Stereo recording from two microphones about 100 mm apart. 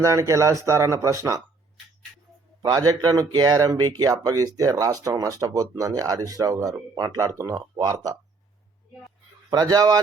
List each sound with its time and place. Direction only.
0.0 s speech: 30° right (ahead or behind)
2.6 s speech: 40° right (ahead or behind)
9.5 s speech: 40° right (ahead or behind)